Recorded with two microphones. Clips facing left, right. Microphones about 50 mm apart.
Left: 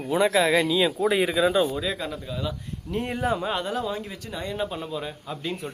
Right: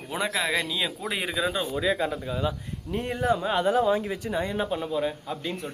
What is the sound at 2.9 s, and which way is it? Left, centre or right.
Speech, centre.